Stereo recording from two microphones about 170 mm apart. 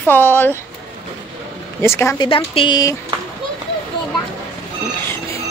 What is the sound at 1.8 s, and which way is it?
Speech, 15° left (ahead or behind).